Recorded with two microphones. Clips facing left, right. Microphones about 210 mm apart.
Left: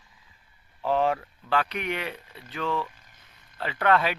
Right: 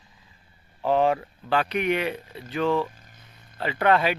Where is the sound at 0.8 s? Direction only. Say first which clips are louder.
Right 3 dB; 5° right (ahead or behind).